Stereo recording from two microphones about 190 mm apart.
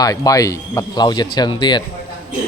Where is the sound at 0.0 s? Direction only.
20° left (ahead or behind).